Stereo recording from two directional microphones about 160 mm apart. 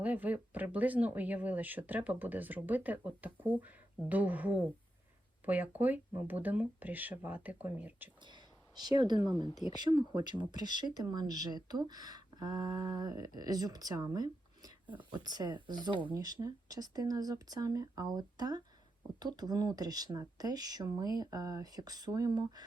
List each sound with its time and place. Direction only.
0.0 s speech: 10° right (ahead or behind)
8.2 s speech: 30° right (ahead or behind)